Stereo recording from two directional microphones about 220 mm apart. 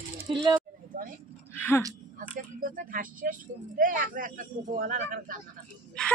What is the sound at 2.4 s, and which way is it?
Speech, 40° right (ahead or behind).